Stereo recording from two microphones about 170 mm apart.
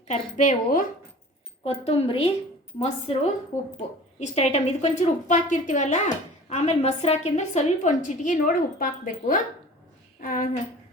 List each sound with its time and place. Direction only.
0.1 s a woman's voice: 45° left (ahead or behind)
1.6 s a woman's voice: 35° left (ahead or behind)